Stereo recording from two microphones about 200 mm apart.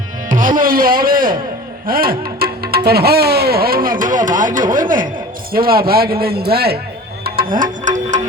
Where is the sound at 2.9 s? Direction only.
50° right (ahead or behind).